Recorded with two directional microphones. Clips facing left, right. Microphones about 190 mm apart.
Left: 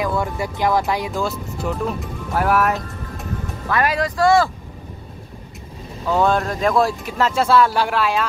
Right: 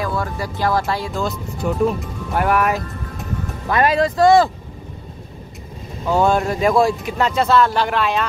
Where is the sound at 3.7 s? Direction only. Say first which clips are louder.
Right 4 dB; 25° right (ahead or behind).